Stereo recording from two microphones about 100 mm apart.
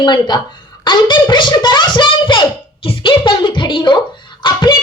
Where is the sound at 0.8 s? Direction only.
50° left (ahead or behind).